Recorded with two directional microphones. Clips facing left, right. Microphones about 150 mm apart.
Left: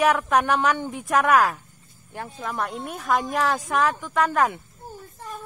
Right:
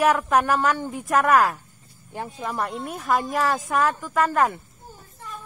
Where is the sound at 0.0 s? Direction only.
Centre (ahead or behind).